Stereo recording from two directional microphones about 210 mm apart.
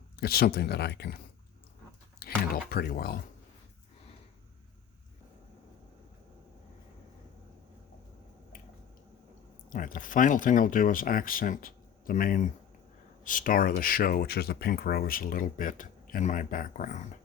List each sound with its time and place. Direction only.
0.2 s speech: 45° left (ahead or behind)
9.6 s speech: 40° left (ahead or behind)